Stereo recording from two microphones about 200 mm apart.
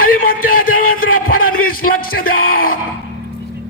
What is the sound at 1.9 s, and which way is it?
Speech, 45° left (ahead or behind).